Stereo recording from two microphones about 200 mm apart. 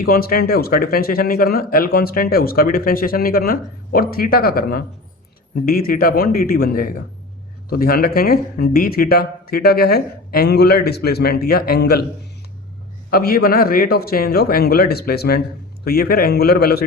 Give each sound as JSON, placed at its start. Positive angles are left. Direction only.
{"t": 0.0, "sound": "speech", "side_deg": 45}
{"t": 13.1, "sound": "speech", "side_deg": 50}